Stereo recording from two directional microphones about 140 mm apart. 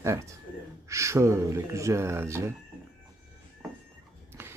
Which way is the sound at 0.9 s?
20° right (ahead or behind).